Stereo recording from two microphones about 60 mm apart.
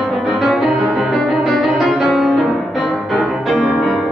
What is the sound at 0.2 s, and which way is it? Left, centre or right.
Music, centre.